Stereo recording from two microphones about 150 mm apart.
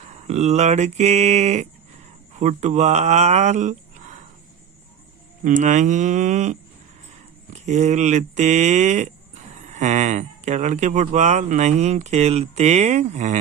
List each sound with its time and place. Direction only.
0.3 s speech: 50° right (ahead or behind)
5.4 s speech: 60° right (ahead or behind)